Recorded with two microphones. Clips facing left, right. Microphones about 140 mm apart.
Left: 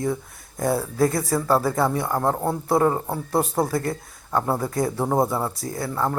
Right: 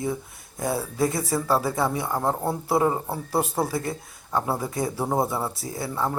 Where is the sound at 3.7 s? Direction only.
55° left (ahead or behind).